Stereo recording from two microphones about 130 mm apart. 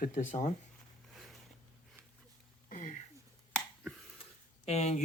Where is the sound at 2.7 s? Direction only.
90° left.